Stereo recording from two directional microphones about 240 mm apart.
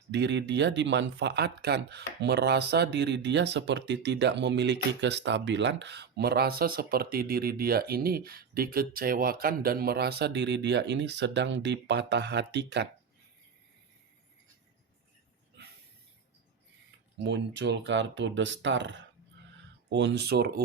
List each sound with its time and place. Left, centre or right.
0.1 s speech: right
15.6 s snort: right
17.2 s speech: right